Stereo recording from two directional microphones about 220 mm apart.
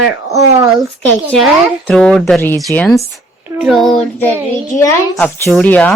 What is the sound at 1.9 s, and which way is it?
A child's voice, 5° left (ahead or behind).